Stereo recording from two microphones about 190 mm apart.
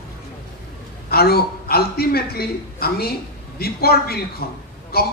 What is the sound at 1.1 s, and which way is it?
A man's voice, 55° left (ahead or behind).